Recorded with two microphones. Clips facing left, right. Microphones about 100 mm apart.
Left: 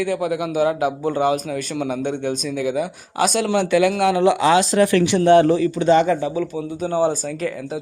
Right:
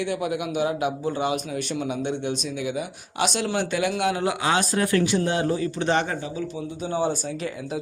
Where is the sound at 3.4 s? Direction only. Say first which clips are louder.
Left 10 dB; 70° left (ahead or behind); by 5.7 s 90° left.